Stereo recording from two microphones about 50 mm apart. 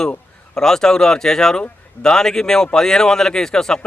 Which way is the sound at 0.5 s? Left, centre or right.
Centre.